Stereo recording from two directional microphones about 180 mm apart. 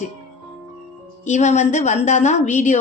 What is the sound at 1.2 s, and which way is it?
A woman's voice, 40° left (ahead or behind).